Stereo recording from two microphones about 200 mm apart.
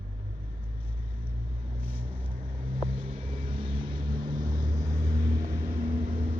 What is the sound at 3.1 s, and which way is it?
Vehicle, 30° right (ahead or behind).